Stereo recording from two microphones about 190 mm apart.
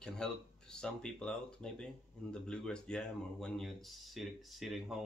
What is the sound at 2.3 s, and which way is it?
Speech, 5° left (ahead or behind).